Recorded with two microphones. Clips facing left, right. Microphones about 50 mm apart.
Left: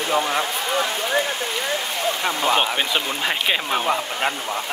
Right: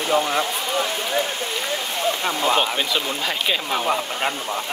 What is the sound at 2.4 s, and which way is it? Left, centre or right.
Speech, centre.